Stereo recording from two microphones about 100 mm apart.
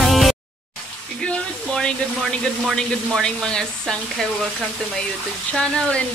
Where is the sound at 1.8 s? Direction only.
5° left (ahead or behind).